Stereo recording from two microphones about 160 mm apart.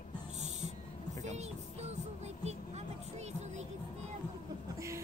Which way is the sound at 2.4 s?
45° right (ahead or behind).